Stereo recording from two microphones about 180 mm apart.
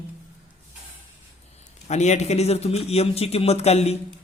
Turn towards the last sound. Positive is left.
turn(degrees=35)  # may be behind; listen again after turning